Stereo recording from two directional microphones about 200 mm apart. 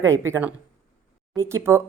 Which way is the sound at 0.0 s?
15° right (ahead or behind).